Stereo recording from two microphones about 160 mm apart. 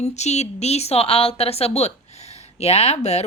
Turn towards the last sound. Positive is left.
turn(degrees=40)  # may be behind; listen again after turning